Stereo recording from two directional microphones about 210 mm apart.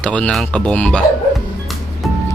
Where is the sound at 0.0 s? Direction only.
5° left (ahead or behind).